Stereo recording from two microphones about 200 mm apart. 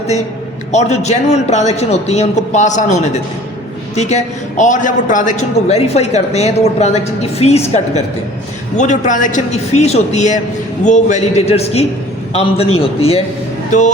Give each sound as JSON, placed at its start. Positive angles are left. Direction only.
{"t": 0.7, "sound": "a man's voice", "side_deg": 35}